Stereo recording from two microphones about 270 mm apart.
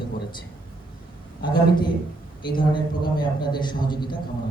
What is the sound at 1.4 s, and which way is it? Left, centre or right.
A man's voice, centre.